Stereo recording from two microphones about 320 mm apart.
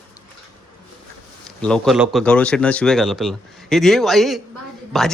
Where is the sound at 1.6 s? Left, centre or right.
Centre.